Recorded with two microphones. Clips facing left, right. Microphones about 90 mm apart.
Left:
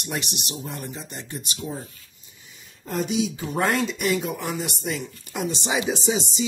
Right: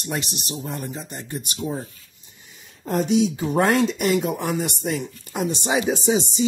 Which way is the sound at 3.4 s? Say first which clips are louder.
Right 5 dB; 50° right (ahead or behind).